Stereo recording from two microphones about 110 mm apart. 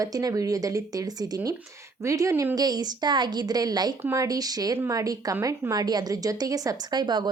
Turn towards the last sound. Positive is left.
turn(degrees=-45)  # may be behind; listen again after turning